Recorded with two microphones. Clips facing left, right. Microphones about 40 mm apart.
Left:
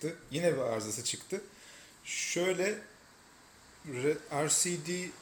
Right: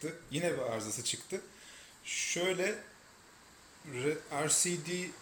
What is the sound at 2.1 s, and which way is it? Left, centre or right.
Speech, centre.